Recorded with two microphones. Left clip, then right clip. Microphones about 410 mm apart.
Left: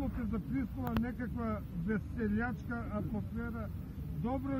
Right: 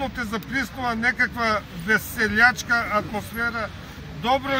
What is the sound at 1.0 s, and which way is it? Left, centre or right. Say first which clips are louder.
Speech: right 19 dB; centre.